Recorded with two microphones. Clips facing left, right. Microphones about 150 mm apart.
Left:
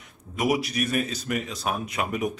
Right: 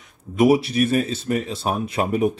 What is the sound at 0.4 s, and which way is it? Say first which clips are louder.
Speech: right 8 dB; 30° right (ahead or behind).